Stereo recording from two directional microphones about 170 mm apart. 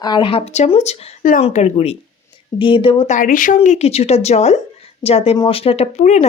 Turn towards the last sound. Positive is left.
turn(degrees=40)  # may be behind; listen again after turning